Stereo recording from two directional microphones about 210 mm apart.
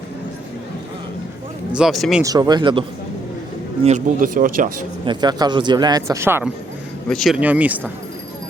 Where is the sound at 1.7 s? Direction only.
Centre (ahead or behind).